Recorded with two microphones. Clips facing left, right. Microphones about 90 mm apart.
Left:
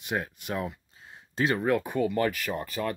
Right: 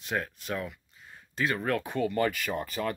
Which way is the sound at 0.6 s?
30° left (ahead or behind).